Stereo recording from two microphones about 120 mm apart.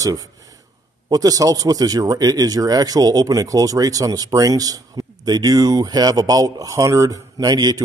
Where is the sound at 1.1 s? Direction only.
30° right (ahead or behind).